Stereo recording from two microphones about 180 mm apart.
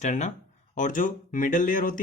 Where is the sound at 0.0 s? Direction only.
40° left (ahead or behind).